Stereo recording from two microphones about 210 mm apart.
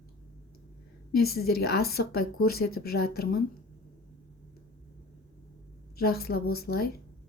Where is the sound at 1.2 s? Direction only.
45° left (ahead or behind).